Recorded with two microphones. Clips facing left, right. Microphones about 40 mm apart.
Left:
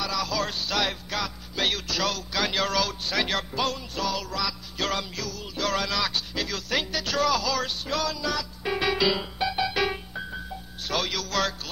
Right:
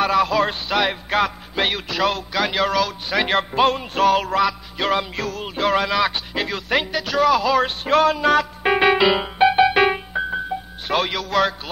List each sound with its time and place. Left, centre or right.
0.0 s a sound: right
1.2 s music: right
2.3 s a sound: centre
3.1 s music: right
4.7 s music: right
5.7 s speech: right
10.9 s music: right